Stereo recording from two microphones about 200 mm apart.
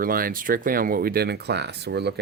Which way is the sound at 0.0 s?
45° right (ahead or behind).